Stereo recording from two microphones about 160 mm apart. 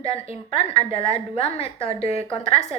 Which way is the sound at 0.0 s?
40° left (ahead or behind).